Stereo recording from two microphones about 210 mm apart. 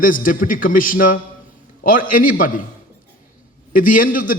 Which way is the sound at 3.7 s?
40° left (ahead or behind).